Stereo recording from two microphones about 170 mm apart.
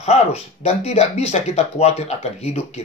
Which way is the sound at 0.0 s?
40° left (ahead or behind).